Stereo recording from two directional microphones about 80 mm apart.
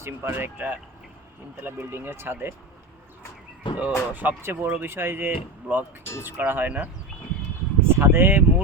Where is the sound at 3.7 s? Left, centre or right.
Left.